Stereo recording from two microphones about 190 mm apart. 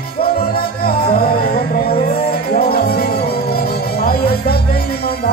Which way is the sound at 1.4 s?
50° left (ahead or behind).